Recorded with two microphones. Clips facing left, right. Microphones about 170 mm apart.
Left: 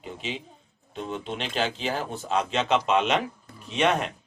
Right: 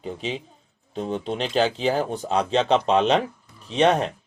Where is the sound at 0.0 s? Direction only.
35° right (ahead or behind).